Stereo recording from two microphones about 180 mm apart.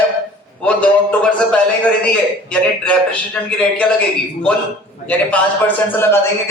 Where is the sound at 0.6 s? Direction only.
5° left (ahead or behind).